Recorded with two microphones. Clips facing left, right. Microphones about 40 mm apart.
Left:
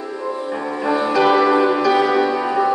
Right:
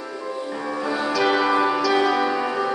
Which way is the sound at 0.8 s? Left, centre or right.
Left.